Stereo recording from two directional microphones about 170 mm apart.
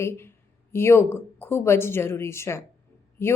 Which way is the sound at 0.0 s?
15° left (ahead or behind).